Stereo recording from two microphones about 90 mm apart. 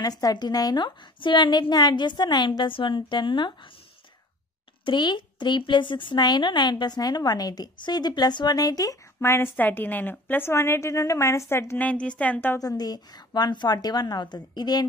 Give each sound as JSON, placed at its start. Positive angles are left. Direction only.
{"t": 0.0, "sound": "a woman's voice", "side_deg": 45}
{"t": 4.8, "sound": "a woman's voice", "side_deg": 60}
{"t": 9.2, "sound": "a woman's voice", "side_deg": 25}
{"t": 11.8, "sound": "a woman's voice", "side_deg": 15}
{"t": 12.5, "sound": "a woman's voice", "side_deg": 45}